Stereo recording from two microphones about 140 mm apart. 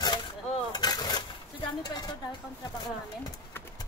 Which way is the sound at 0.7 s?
30° left (ahead or behind).